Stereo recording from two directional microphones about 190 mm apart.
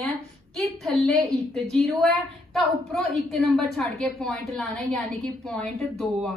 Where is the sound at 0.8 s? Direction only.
Centre (ahead or behind).